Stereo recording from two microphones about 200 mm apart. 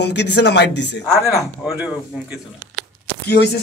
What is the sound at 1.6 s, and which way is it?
Speech, 5° right (ahead or behind).